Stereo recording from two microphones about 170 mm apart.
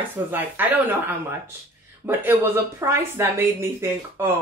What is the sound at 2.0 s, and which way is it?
A woman's voice, 15° right (ahead or behind).